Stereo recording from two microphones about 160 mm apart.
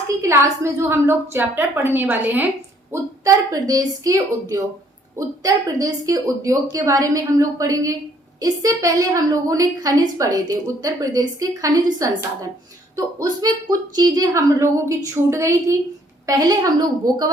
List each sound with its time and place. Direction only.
0.2 s a woman's voice: 15° right (ahead or behind)
13.4 s a woman's voice: 25° right (ahead or behind)